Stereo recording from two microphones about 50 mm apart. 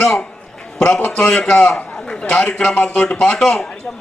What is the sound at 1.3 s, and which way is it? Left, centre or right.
A man's voice, centre.